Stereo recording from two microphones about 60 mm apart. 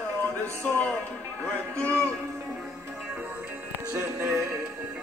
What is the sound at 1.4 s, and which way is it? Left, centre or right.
Speech, centre.